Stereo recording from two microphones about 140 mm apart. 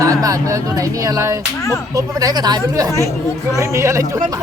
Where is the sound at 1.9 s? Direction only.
25° right (ahead or behind).